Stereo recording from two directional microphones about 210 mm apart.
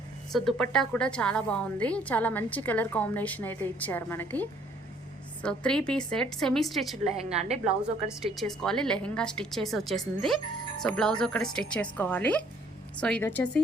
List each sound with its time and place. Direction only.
0.3 s a woman's voice: centre (ahead or behind)
7.3 s a woman's voice: 30° right (ahead or behind)
7.6 s a woman's voice: centre (ahead or behind)